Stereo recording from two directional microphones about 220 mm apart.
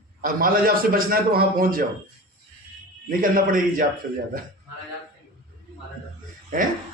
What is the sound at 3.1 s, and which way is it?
Speech, 40° right (ahead or behind).